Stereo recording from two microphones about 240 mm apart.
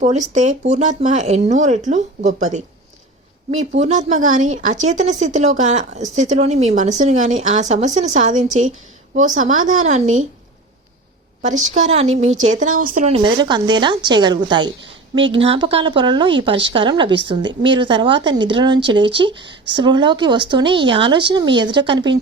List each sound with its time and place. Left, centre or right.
0.0 s speech: right
3.8 s speech: right
11.4 s speech: right